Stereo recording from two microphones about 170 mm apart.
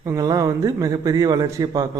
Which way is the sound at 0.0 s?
20° right (ahead or behind).